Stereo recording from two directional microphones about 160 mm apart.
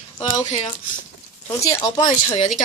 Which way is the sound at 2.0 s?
25° left (ahead or behind).